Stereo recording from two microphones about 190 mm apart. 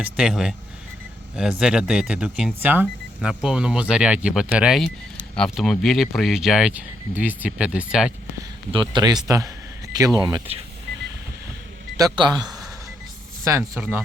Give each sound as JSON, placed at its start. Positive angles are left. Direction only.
{"t": 0.0, "sound": "speech", "side_deg": -5}
{"t": 8.7, "sound": "speech", "side_deg": -25}
{"t": 10.2, "sound": "speech", "side_deg": -20}
{"t": 11.9, "sound": "speech", "side_deg": -20}